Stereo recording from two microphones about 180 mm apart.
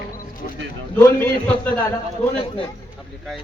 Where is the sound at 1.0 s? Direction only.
10° left (ahead or behind).